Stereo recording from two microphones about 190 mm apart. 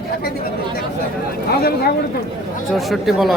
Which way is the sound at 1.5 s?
55° left (ahead or behind).